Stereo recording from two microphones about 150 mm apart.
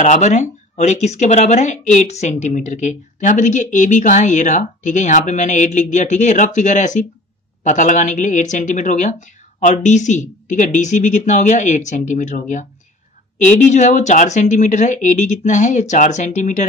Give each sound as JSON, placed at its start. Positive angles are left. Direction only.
{"t": 0.0, "sound": "a woman's voice", "side_deg": 50}